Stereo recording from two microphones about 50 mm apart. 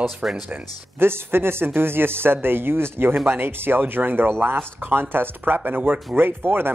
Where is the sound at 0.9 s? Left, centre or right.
Right.